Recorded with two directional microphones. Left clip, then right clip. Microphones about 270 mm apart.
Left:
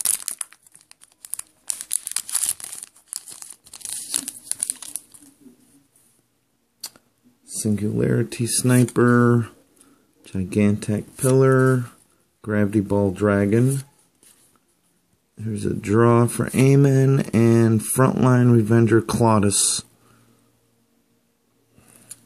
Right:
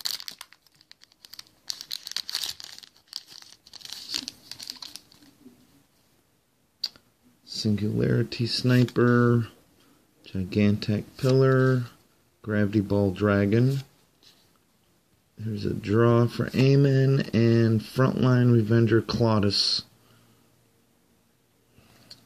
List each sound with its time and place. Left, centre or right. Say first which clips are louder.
0.0 s crumpling: left 2 dB; centre
1.7 s crumpling: left 1 dB; centre
7.6 s speech: left 5 dB; centre
15.3 s speech: left 5 dB; centre